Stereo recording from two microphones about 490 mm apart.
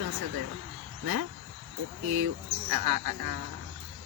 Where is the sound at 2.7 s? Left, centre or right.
Right.